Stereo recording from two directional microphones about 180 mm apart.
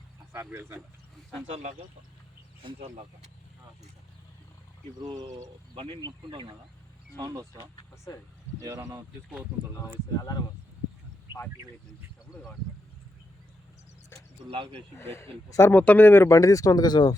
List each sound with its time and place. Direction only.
0.3 s speech: 15° right (ahead or behind)
1.5 s speech: 35° right (ahead or behind)
4.9 s speech: 20° right (ahead or behind)
7.8 s speech: 20° left (ahead or behind)
8.6 s speech: 20° right (ahead or behind)
10.2 s speech: 20° left (ahead or behind)
14.5 s speech: 30° right (ahead or behind)
14.9 s speech: 15° left (ahead or behind)